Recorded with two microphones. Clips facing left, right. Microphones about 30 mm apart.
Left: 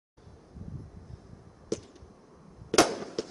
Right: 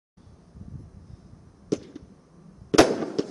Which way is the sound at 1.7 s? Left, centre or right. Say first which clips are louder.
Right 6 dB; centre.